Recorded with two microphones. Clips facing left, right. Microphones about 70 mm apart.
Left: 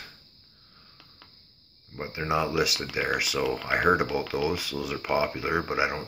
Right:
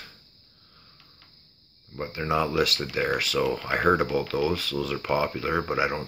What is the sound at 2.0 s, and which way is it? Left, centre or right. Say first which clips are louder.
Speech: right 1 dB; centre.